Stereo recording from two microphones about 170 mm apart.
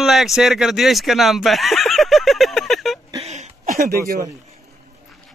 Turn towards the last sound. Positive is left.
turn(degrees=-60)  # may be behind; listen again after turning